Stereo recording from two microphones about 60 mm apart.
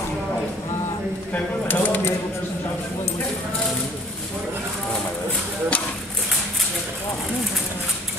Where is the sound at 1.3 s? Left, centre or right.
Left.